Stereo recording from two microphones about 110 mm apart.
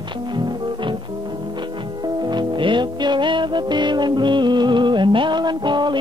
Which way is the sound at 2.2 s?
45° right (ahead or behind).